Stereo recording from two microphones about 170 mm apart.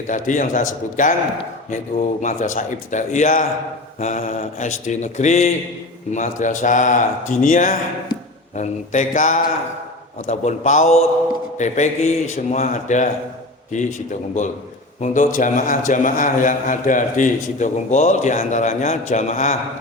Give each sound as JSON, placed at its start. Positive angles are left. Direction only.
{"t": 0.1, "sound": "a man's voice", "side_deg": 50}
{"t": 15.0, "sound": "a man's voice", "side_deg": 50}